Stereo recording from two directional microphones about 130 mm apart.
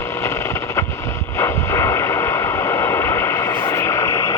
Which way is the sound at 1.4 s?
20° left (ahead or behind).